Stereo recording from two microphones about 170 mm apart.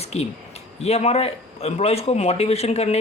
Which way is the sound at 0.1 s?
40° left (ahead or behind).